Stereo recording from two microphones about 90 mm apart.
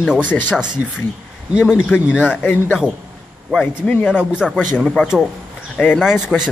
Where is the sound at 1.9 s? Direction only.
15° left (ahead or behind).